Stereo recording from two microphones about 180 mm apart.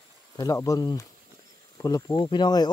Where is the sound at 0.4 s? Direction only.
20° left (ahead or behind).